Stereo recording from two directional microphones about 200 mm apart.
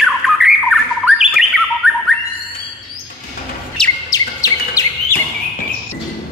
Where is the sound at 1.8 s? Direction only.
Centre (ahead or behind).